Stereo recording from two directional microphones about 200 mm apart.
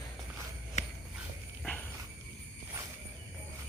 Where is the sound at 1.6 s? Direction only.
5° left (ahead or behind).